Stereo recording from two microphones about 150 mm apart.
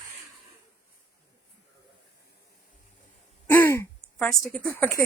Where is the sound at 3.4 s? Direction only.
15° left (ahead or behind).